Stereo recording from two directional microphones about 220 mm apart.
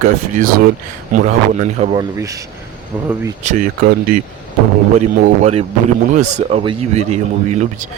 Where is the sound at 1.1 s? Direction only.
35° right (ahead or behind).